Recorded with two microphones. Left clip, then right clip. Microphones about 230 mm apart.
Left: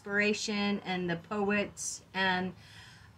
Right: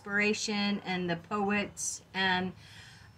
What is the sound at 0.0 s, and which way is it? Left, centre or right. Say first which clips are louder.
A woman's voice: even; centre.